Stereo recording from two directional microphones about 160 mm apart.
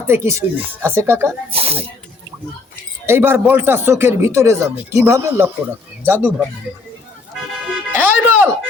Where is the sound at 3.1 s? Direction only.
15° right (ahead or behind).